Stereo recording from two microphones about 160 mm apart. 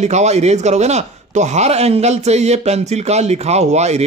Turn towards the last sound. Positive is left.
turn(degrees=-45)  # may be behind; listen again after turning